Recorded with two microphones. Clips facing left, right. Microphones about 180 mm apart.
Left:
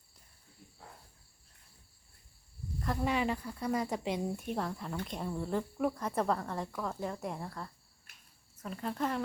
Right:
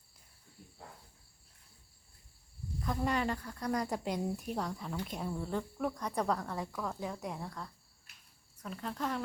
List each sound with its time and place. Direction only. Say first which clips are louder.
2.8 s speech: left 1 dB; centre (ahead or behind)